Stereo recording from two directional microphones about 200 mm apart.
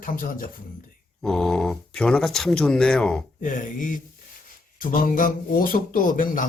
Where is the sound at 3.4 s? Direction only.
40° left (ahead or behind).